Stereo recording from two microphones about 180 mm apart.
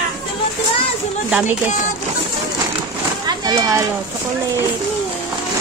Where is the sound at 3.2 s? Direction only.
20° right (ahead or behind).